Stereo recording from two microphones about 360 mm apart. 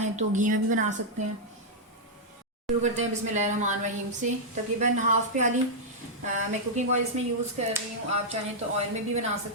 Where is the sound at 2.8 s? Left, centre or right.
Centre.